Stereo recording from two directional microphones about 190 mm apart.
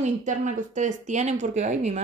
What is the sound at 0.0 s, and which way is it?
A woman's voice, 40° right (ahead or behind).